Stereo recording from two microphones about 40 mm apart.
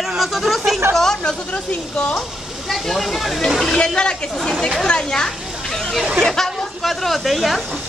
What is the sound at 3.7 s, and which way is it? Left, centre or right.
Speech, left.